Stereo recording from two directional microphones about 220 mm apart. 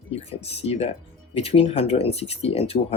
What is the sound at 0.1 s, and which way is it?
Speech, 25° left (ahead or behind).